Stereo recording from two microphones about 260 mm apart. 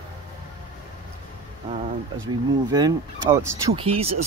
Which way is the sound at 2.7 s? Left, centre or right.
Centre.